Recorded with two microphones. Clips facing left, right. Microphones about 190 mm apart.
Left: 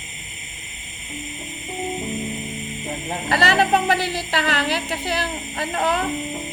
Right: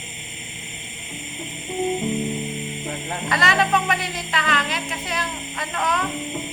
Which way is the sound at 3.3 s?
30° left (ahead or behind).